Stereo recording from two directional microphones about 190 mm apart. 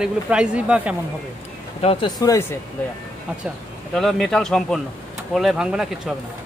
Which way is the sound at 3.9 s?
Centre (ahead or behind).